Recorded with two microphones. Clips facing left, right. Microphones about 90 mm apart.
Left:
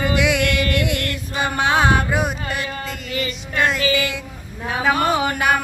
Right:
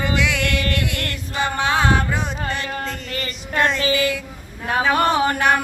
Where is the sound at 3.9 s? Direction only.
20° left (ahead or behind).